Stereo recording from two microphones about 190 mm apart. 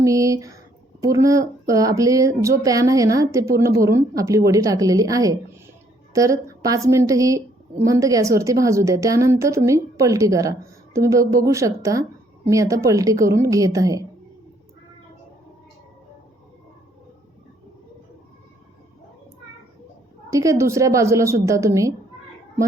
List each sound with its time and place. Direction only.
0.0 s a sound: 15° right (ahead or behind)
1.0 s a woman's voice: 15° right (ahead or behind)
20.3 s a woman's voice: 15° right (ahead or behind)